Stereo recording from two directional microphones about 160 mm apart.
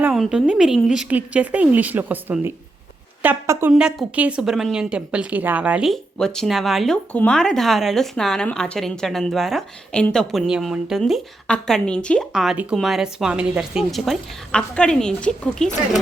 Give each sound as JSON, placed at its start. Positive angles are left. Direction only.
{"t": 0.0, "sound": "a woman's voice", "side_deg": -5}
{"t": 3.7, "sound": "a woman's voice", "side_deg": -5}